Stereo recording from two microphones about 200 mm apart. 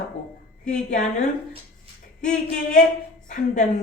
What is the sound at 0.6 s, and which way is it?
Speech, 35° left (ahead or behind).